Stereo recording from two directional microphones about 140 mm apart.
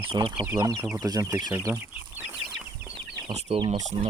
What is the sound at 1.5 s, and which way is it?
Chicken, 15° right (ahead or behind).